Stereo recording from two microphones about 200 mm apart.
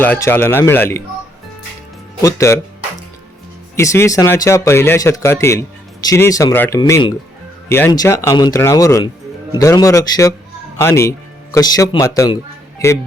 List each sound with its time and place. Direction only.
0.0 s speech: 10° left (ahead or behind)
2.2 s speech: 15° left (ahead or behind)
3.8 s speech: 15° left (ahead or behind)